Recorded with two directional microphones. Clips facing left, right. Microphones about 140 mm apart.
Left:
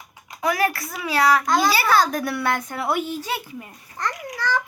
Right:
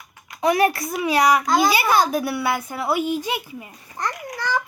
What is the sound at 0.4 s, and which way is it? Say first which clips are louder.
A child's voice: right 4 dB; 20° right (ahead or behind).